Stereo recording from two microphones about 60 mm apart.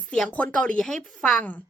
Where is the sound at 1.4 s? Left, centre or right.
Left.